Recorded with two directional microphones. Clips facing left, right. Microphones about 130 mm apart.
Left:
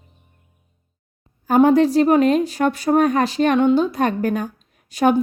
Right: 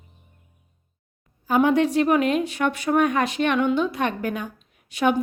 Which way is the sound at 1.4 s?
40° left (ahead or behind).